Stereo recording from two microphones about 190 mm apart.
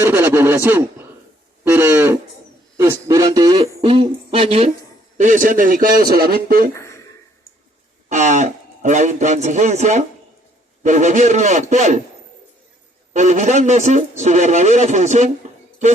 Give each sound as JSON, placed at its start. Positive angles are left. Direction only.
{"t": 0.0, "sound": "a sound", "side_deg": -10}
{"t": 2.7, "sound": "speech", "side_deg": -15}
{"t": 5.1, "sound": "a man's voice", "side_deg": -40}
{"t": 6.7, "sound": "a sound", "side_deg": 15}
{"t": 8.1, "sound": "a man's voice", "side_deg": -40}
{"t": 13.1, "sound": "a man's voice", "side_deg": -40}